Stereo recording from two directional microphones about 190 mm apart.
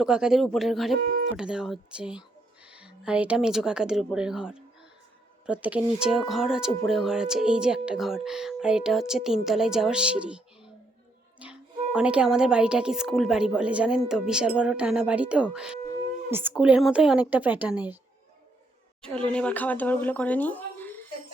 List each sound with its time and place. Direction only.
0.0 s speech: 5° right (ahead or behind)
1.0 s speech: 45° right (ahead or behind)
1.4 s a woman's voice: 5° right (ahead or behind)
19.0 s speech: 5° left (ahead or behind)